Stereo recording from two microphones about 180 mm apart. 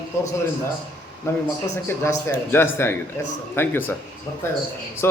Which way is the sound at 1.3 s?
15° left (ahead or behind).